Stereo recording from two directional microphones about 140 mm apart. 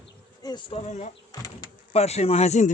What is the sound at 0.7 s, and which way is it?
Speech, 55° left (ahead or behind).